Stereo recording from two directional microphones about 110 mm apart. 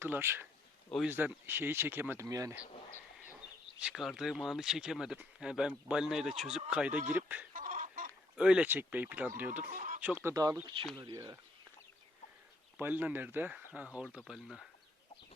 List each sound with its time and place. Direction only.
0.0 s speech: 20° right (ahead or behind)
2.2 s speech: 30° right (ahead or behind)
3.8 s speech: 5° right (ahead or behind)
10.3 s speech: 30° right (ahead or behind)
12.7 s speech: 15° right (ahead or behind)